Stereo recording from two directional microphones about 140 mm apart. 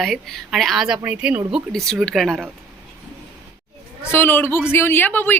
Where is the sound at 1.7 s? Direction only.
5° left (ahead or behind).